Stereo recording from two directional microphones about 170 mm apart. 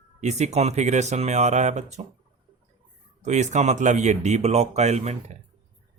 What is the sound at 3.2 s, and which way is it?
Speech, 45° right (ahead or behind).